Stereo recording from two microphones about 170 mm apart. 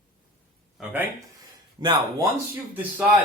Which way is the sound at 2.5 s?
10° right (ahead or behind).